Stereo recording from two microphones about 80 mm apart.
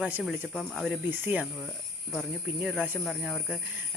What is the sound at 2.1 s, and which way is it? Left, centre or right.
Speech, centre.